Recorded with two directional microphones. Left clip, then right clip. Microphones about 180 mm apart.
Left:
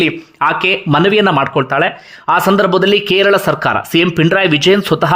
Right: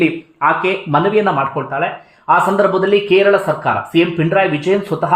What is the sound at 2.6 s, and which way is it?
Speech, 30° left (ahead or behind).